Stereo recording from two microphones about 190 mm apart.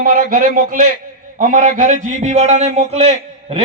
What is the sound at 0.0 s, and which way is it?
A man's voice, 50° right (ahead or behind).